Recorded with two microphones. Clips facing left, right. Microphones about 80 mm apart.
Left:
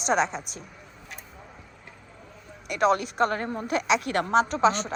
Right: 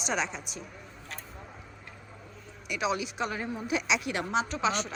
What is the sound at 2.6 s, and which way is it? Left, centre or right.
A woman's voice, left.